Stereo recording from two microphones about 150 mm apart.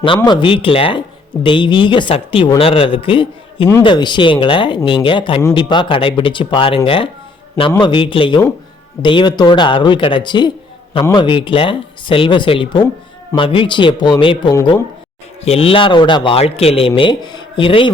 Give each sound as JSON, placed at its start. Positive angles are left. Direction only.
{"t": 0.3, "sound": "speech", "side_deg": 35}
{"t": 15.4, "sound": "speech", "side_deg": 40}